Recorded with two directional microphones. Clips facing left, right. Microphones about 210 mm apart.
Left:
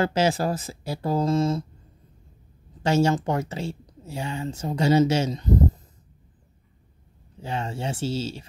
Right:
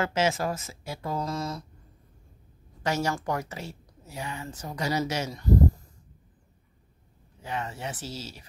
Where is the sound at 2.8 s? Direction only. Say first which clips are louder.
Left 7 dB; 25° left (ahead or behind).